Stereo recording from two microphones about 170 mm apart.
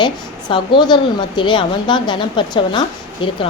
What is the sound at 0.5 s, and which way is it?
A woman's voice, 25° left (ahead or behind).